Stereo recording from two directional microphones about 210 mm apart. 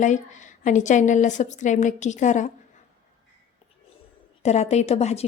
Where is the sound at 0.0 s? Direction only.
35° left (ahead or behind).